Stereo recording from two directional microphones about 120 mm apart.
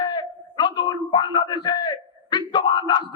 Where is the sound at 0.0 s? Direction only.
40° left (ahead or behind).